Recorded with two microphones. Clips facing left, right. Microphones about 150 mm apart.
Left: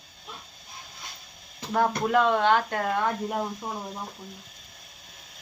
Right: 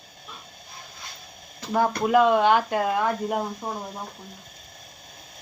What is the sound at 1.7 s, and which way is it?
Speech, 5° right (ahead or behind).